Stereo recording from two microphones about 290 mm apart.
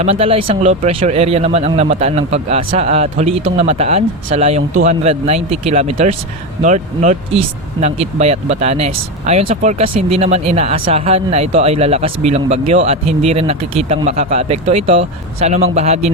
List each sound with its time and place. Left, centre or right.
0.0 s speech: centre